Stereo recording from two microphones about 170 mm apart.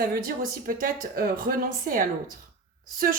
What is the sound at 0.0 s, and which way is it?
Speech, 60° right (ahead or behind).